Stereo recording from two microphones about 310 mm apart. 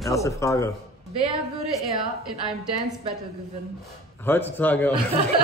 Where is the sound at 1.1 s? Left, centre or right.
Centre.